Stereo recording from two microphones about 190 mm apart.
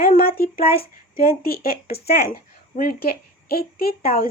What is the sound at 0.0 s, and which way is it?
A woman's voice, 50° left (ahead or behind).